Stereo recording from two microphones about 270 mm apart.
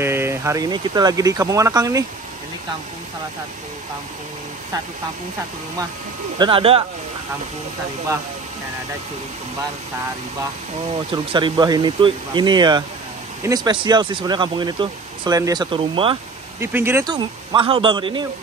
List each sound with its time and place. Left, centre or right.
0.0 s speech: centre
6.3 s speech: centre
11.1 s speech: centre
16.5 s speech: centre